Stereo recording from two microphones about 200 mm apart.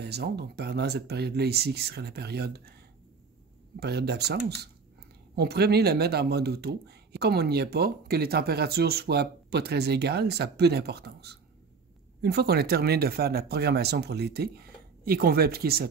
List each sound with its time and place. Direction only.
0.0 s speech: 55° right (ahead or behind)
3.8 s speech: 55° right (ahead or behind)